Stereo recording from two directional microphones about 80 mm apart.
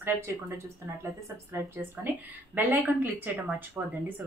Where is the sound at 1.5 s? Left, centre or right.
Right.